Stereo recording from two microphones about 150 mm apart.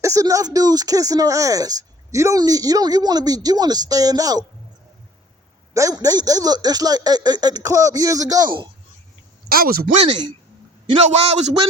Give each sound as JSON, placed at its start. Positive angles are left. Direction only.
{"t": 0.0, "sound": "speech", "side_deg": -20}
{"t": 5.7, "sound": "speech", "side_deg": -25}
{"t": 9.5, "sound": "speech", "side_deg": -75}
{"t": 11.0, "sound": "a man's voice", "side_deg": -45}